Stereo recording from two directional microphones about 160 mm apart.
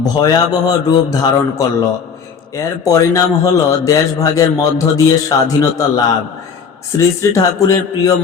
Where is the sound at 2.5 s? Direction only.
20° left (ahead or behind).